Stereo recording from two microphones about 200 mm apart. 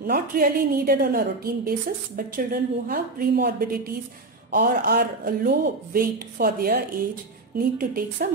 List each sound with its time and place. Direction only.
0.0 s a woman's voice: 45° right (ahead or behind)